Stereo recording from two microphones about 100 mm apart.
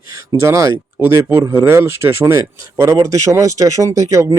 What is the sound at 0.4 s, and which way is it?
Speech, 30° right (ahead or behind).